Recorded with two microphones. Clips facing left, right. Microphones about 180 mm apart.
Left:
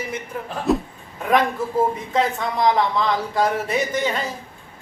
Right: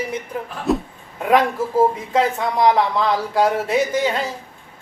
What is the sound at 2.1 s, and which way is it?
A man's voice, 10° right (ahead or behind).